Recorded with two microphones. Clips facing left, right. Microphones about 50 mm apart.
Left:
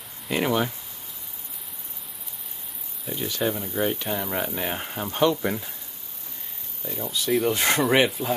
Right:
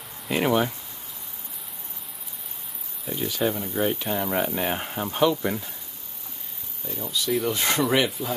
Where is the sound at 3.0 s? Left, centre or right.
Centre.